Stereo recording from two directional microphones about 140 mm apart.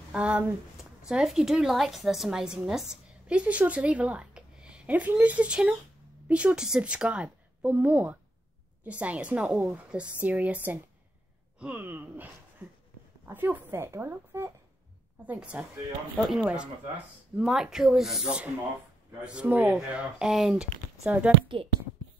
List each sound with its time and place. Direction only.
0.1 s a woman's voice: 10° right (ahead or behind)